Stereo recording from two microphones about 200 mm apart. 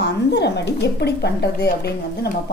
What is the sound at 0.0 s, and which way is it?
A woman's voice, 60° left (ahead or behind).